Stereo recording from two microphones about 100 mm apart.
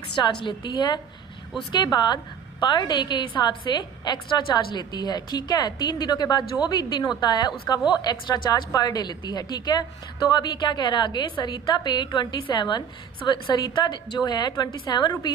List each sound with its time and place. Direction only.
0.2 s a woman's voice: 50° left (ahead or behind)